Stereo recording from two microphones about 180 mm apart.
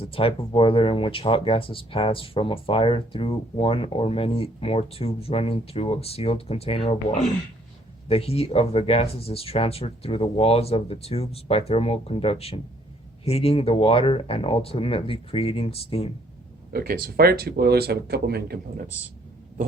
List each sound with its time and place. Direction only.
0.0 s speech: 30° left (ahead or behind)
16.7 s speech: 55° right (ahead or behind)